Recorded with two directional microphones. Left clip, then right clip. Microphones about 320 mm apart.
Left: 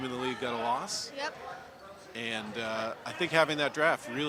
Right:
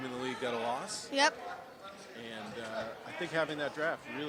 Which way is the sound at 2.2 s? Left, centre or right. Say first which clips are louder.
Left 9 dB; left.